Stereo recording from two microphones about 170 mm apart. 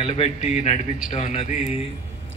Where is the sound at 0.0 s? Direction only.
40° left (ahead or behind).